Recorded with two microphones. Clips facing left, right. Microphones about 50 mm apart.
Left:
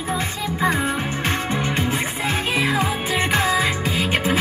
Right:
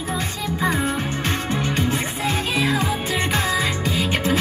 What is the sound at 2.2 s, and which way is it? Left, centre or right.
Music, left.